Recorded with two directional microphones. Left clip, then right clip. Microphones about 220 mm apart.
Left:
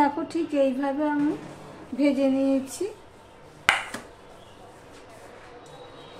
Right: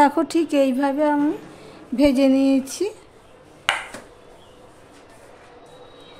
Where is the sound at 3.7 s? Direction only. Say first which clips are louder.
Even; 20° left (ahead or behind).